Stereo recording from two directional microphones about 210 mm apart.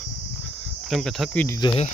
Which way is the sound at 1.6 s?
30° left (ahead or behind).